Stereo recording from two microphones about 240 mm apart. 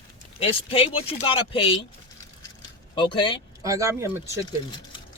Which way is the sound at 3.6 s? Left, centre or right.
Centre.